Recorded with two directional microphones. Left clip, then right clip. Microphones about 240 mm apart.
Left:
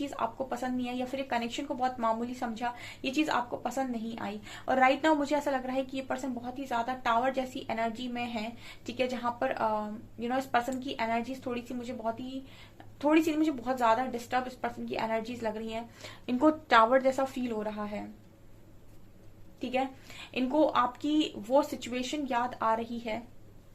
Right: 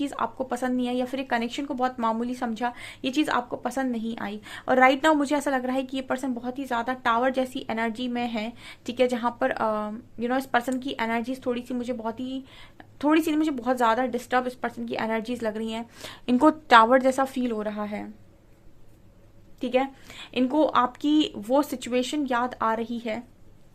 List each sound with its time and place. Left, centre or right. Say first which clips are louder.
0.0 s speech: right 5 dB; right
19.5 s speech: right 7 dB; right